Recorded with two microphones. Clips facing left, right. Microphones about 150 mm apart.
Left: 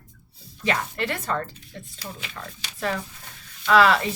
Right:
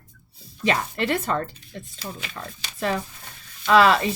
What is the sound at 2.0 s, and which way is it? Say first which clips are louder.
Speech: right 3 dB; 35° right (ahead or behind).